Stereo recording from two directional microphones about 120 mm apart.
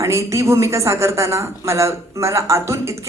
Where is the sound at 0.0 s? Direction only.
25° right (ahead or behind).